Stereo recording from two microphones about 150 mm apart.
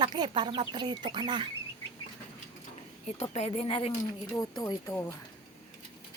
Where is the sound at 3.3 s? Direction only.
45° left (ahead or behind).